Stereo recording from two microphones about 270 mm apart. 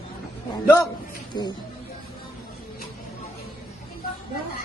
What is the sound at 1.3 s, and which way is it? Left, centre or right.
Speech, centre.